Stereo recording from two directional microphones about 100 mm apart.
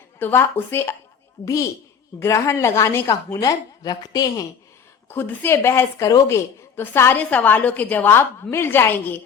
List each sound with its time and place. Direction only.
0.2 s a woman's voice: 20° left (ahead or behind)
2.1 s a woman's voice: 30° left (ahead or behind)
5.0 s a woman's voice: 20° left (ahead or behind)